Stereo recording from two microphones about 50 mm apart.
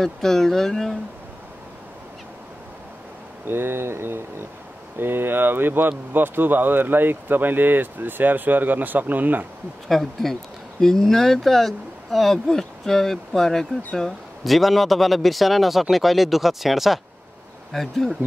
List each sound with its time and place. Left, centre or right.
0.0 s speech: centre
3.4 s speech: right
9.8 s speech: centre